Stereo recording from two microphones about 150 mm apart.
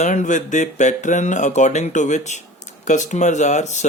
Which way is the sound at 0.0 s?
55° left (ahead or behind).